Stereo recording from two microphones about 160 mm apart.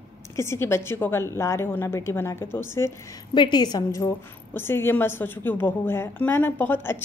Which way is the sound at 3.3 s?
30° left (ahead or behind).